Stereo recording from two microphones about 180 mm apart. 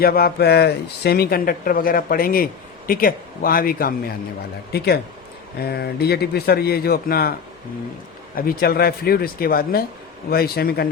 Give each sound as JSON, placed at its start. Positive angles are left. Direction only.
{"t": 0.0, "sound": "speech", "side_deg": 55}
{"t": 5.6, "sound": "speech", "side_deg": 60}
{"t": 8.4, "sound": "speech", "side_deg": 55}